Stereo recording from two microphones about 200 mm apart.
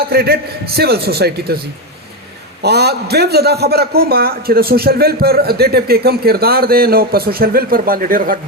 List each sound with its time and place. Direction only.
0.0 s a man's voice: 50° right (ahead or behind)